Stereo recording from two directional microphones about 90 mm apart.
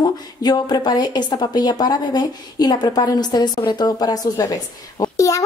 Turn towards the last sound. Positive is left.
turn(degrees=35)  # may be behind; listen again after turning